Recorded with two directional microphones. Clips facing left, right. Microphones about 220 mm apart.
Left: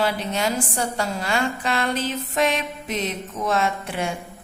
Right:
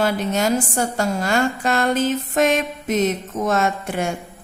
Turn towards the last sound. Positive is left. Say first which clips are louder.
# right 3 dB
turn(degrees=-45)  # may be behind; listen again after turning